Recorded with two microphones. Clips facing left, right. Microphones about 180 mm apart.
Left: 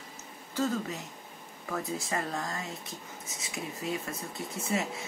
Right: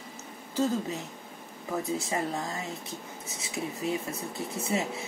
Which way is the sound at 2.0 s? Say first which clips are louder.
Right 3 dB; 20° right (ahead or behind).